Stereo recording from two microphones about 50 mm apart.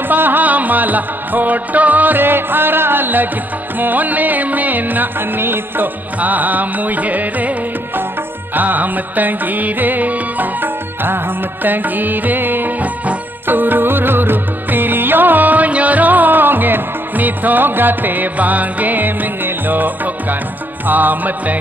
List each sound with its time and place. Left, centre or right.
0.1 s music: right
6.1 s music: right
13.5 s music: right